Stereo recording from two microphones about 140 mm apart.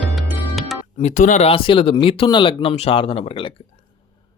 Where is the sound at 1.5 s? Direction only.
40° left (ahead or behind).